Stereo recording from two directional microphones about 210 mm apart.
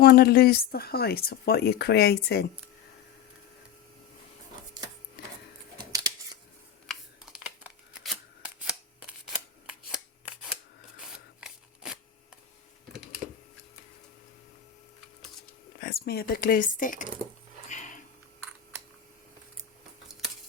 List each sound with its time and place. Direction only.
0.0 s speech: 45° left (ahead or behind)
5.7 s scissors: 20° right (ahead or behind)
7.3 s scissors: 5° right (ahead or behind)
11.0 s a sound: 5° right (ahead or behind)
15.8 s speech: 45° left (ahead or behind)
17.7 s a sound: 35° left (ahead or behind)